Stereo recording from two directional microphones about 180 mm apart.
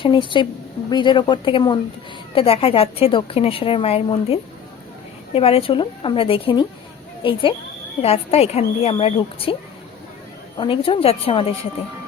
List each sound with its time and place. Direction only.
0.0 s a woman's voice: 25° left (ahead or behind)
10.6 s a woman's voice: 30° left (ahead or behind)